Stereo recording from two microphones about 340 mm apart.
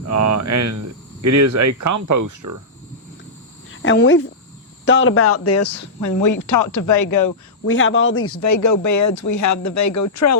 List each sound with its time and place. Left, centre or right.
0.0 s speech: right
3.7 s speech: left
7.6 s a man's voice: left